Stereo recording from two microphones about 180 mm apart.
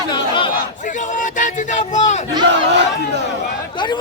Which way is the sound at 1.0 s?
45° left (ahead or behind).